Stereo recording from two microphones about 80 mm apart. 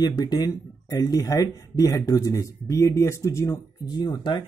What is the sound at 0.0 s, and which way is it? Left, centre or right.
Speech, left.